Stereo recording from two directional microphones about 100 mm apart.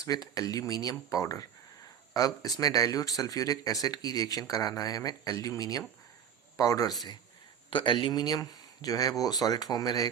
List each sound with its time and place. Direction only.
0.0 s speech: 35° left (ahead or behind)
7.7 s speech: 55° left (ahead or behind); by 10.1 s 40° left (ahead or behind)